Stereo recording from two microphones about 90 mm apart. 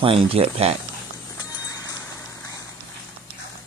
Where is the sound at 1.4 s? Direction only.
45° left (ahead or behind).